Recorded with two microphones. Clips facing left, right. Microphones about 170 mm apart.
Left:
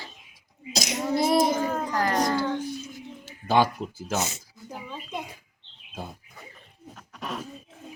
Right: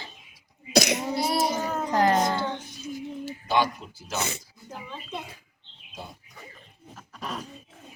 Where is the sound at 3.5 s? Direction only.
50° left (ahead or behind).